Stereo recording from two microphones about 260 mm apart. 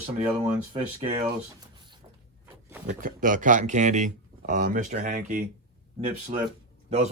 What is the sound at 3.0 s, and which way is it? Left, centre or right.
Speech, right.